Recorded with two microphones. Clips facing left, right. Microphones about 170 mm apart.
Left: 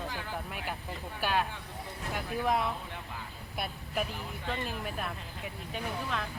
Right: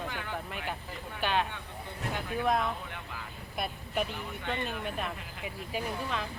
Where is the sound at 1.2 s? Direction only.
5° left (ahead or behind).